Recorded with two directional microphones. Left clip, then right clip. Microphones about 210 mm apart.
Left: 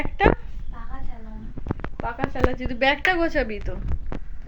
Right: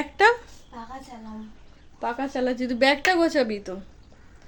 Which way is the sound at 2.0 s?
30° right (ahead or behind).